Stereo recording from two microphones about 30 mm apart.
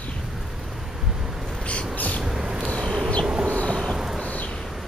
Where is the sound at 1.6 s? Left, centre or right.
Left.